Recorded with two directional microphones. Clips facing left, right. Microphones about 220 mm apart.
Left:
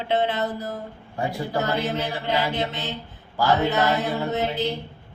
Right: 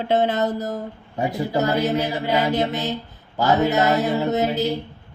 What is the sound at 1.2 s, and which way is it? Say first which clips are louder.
Speech: right 3 dB; 20° right (ahead or behind).